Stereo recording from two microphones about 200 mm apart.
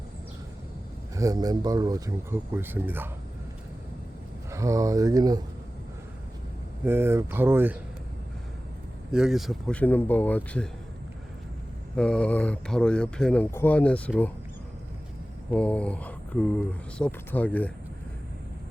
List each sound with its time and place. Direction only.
1.1 s speech: 15° right (ahead or behind)
4.5 s speech: 15° right (ahead or behind)
6.8 s speech: 10° right (ahead or behind)
9.1 s speech: centre (ahead or behind)
11.9 s speech: 5° left (ahead or behind)
15.5 s speech: 5° left (ahead or behind)